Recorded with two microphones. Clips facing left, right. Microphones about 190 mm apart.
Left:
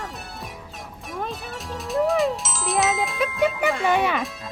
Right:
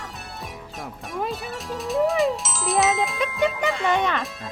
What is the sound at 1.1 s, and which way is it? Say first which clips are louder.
Speech: right 2 dB; centre (ahead or behind).